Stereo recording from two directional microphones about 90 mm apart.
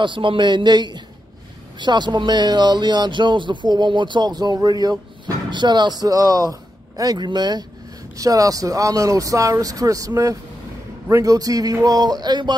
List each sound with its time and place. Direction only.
0.0 s speech: 70° right (ahead or behind)